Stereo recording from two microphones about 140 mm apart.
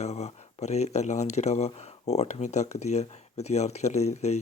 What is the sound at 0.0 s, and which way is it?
Speech, 50° left (ahead or behind).